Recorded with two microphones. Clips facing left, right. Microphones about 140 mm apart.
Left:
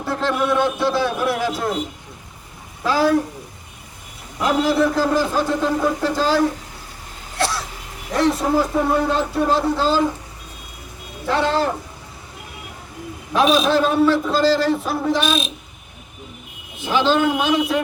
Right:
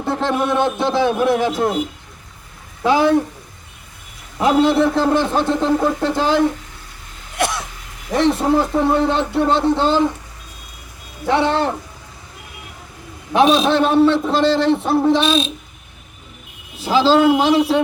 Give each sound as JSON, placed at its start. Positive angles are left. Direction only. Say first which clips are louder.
{"t": 0.0, "sound": "a man's voice", "louder": "right 2 dB", "side_deg": -20}
{"t": 2.8, "sound": "a man's voice", "louder": "right 3 dB", "side_deg": -20}
{"t": 4.4, "sound": "a man's voice", "louder": "right 4 dB", "side_deg": -25}
{"t": 7.3, "sound": "a sound", "louder": "right 2 dB", "side_deg": -20}
{"t": 8.1, "sound": "a man's voice", "louder": "right 2 dB", "side_deg": -25}
{"t": 11.3, "sound": "a man's voice", "louder": "right 2 dB", "side_deg": -20}
{"t": 13.3, "sound": "a man's voice", "louder": "right 2 dB", "side_deg": -25}
{"t": 16.7, "sound": "a man's voice", "louder": "right 4 dB", "side_deg": -35}